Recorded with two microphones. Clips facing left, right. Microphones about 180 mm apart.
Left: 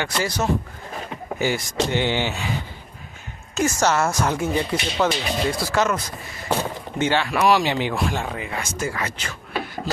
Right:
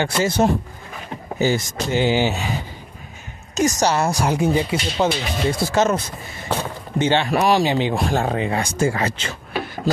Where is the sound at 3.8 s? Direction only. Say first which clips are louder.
Right 1 dB; 15° right (ahead or behind).